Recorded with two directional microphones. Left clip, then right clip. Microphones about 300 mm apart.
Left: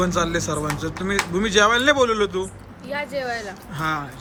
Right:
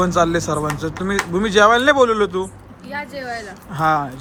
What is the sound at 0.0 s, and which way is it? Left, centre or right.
Speech, centre.